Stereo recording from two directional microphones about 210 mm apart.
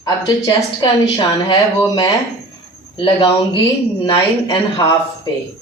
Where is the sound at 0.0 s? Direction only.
20° left (ahead or behind).